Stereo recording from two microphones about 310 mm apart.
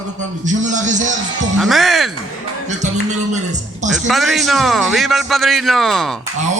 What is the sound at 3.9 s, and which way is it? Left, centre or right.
A man's voice, centre.